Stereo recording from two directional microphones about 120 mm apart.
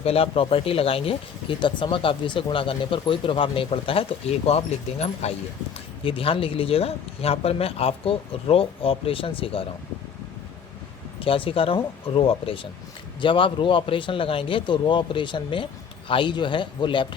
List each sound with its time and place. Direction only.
0.0 s speech: 55° left (ahead or behind)
6.1 s speech: 50° left (ahead or behind)
11.2 s speech: 50° left (ahead or behind)